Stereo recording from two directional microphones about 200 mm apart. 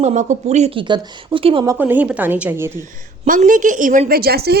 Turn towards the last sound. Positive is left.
turn(degrees=-50)  # may be behind; listen again after turning